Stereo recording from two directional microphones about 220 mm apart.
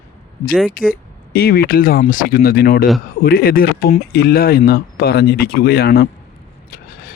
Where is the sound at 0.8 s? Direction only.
40° left (ahead or behind).